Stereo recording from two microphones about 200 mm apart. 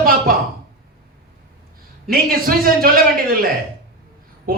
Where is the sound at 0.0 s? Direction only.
45° right (ahead or behind).